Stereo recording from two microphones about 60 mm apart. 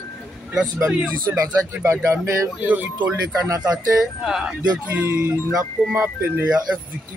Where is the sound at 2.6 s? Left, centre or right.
Right.